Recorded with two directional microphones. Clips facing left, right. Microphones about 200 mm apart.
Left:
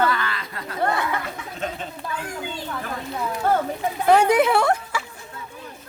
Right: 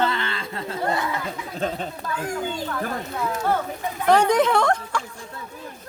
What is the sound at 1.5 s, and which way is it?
Speech, 35° right (ahead or behind).